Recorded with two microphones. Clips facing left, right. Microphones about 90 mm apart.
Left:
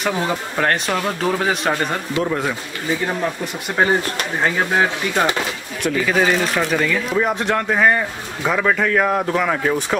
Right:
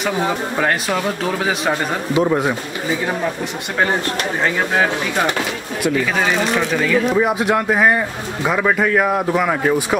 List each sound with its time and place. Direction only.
0.6 s speech: 5° right (ahead or behind)
2.1 s a man's voice: 20° right (ahead or behind)
4.4 s speech: centre (ahead or behind)